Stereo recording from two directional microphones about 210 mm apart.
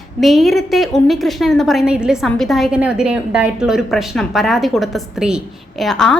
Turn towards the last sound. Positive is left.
turn(degrees=5)  # may be behind; listen again after turning